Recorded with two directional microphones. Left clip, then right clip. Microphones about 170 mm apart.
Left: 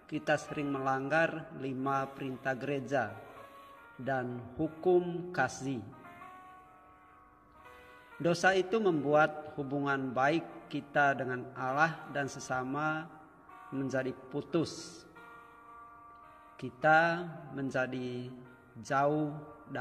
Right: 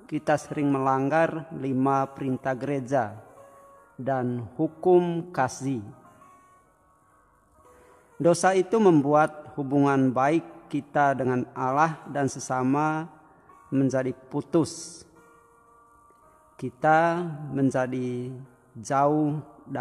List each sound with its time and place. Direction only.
0.1 s a man's voice: 35° right (ahead or behind)
8.2 s a man's voice: 35° right (ahead or behind)
16.5 s a man's voice: 30° right (ahead or behind)